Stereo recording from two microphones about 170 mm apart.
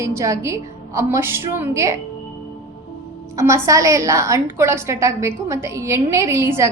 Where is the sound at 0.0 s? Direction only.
15° right (ahead or behind).